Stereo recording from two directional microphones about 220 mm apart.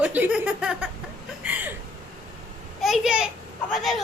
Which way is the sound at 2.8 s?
Centre (ahead or behind).